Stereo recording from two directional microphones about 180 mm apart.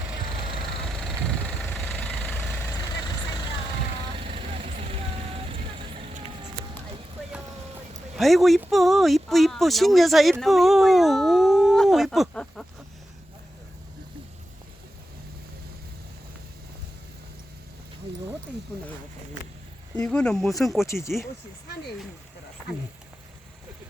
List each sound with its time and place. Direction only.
0.5 s vehicle: centre (ahead or behind)
4.2 s vehicle: 30° right (ahead or behind)
8.1 s speech: centre (ahead or behind)
10.4 s a sound: centre (ahead or behind)
20.0 s speech: 5° left (ahead or behind)
20.8 s speech: 15° left (ahead or behind)